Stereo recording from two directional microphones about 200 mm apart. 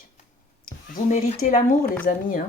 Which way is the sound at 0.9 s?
40° left (ahead or behind).